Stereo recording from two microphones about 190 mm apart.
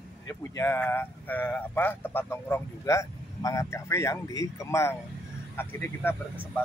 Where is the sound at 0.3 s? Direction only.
15° left (ahead or behind).